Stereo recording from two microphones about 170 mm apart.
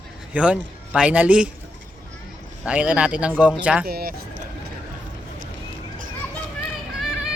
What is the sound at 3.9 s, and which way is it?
Speech, 65° right (ahead or behind).